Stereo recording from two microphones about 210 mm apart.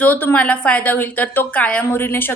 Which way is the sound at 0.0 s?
10° left (ahead or behind).